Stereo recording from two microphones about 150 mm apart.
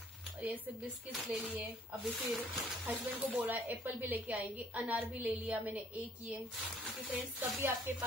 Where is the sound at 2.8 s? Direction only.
10° right (ahead or behind).